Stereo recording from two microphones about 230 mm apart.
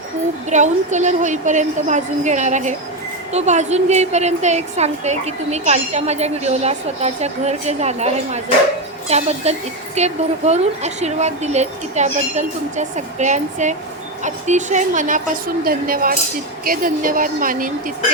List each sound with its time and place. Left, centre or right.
0.5 s a woman's voice: right